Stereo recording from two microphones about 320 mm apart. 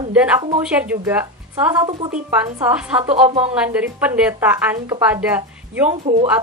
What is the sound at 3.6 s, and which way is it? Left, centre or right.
Speech, centre.